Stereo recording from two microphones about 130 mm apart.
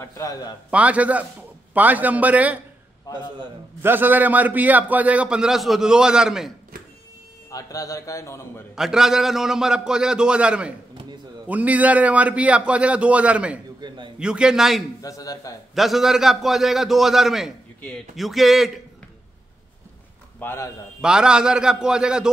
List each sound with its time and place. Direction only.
0.0 s a man's voice: 25° left (ahead or behind)
0.7 s a man's voice: 10° right (ahead or behind)
3.1 s a man's voice: 35° right (ahead or behind)
3.8 s a man's voice: 15° right (ahead or behind)
7.5 s a man's voice: 25° left (ahead or behind)
8.7 s a man's voice: 5° right (ahead or behind)
13.7 s a sound: 35° right (ahead or behind)
14.2 s a man's voice: 5° right (ahead or behind)
15.0 s a man's voice: 25° left (ahead or behind)
15.7 s a man's voice: centre (ahead or behind)
20.3 s a man's voice: 20° left (ahead or behind)
21.0 s a man's voice: 5° right (ahead or behind)